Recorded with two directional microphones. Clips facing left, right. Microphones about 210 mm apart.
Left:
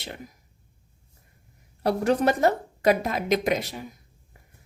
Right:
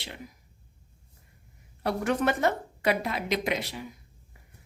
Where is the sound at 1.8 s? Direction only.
35° left (ahead or behind).